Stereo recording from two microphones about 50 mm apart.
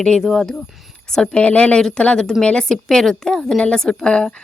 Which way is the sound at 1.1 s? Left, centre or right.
Centre.